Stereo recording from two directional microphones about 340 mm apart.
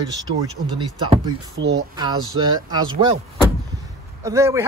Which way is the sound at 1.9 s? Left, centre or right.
Centre.